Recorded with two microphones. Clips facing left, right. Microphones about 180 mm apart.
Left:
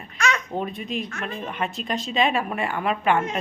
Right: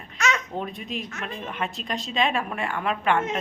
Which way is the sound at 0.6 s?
Centre (ahead or behind).